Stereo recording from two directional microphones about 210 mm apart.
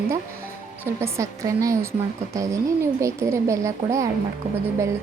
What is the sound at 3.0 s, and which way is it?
Speech, 15° right (ahead or behind).